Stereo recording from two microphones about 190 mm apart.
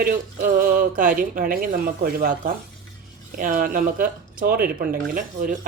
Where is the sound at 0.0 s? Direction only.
45° right (ahead or behind).